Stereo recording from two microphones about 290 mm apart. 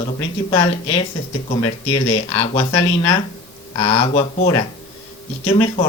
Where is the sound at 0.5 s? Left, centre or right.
Centre.